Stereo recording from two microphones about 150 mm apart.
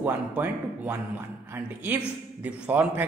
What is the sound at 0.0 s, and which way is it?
A woman's voice, 15° right (ahead or behind).